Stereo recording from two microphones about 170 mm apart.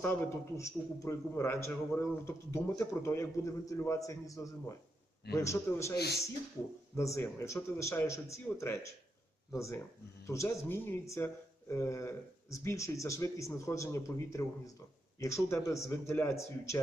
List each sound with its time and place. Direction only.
0.0 s a man's voice: 15° left (ahead or behind)
6.0 s speech: 70° left (ahead or behind)
6.9 s a man's voice: 15° left (ahead or behind)
15.4 s a man's voice: 15° left (ahead or behind)